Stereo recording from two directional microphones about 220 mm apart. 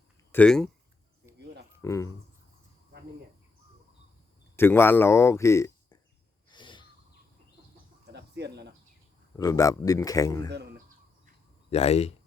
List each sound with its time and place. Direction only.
0.3 s speech: 5° left (ahead or behind)
1.8 s speech: 15° left (ahead or behind)
4.5 s speech: 10° left (ahead or behind)
6.5 s wheeze: 20° left (ahead or behind)
8.1 s a sound: 50° right (ahead or behind)
9.3 s speech: 15° left (ahead or behind)
11.7 s speech: 30° left (ahead or behind)